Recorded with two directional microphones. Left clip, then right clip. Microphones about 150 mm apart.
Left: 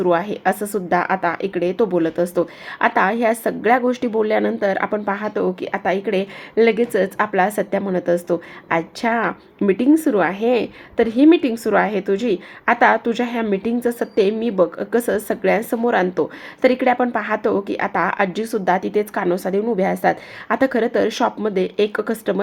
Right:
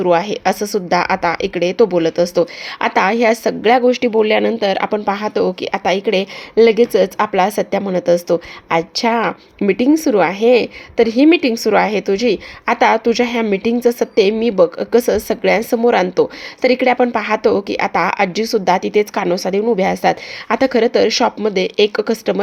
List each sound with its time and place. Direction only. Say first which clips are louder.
0.0 s speech: right 4 dB; 30° right (ahead or behind)
5.8 s speech: right 4 dB; 45° right (ahead or behind)